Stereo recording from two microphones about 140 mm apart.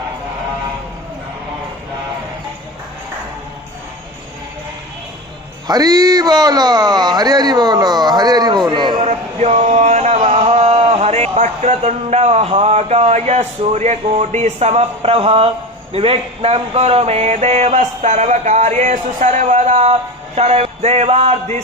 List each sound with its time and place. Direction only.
5.6 s speech: 30° right (ahead or behind)
9.0 s speech: 50° right (ahead or behind)